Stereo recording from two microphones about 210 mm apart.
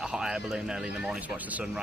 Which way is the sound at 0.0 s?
5° right (ahead or behind).